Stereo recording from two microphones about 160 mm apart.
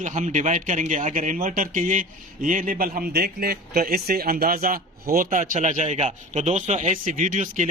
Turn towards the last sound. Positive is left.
turn(degrees=-50)  # may be behind; listen again after turning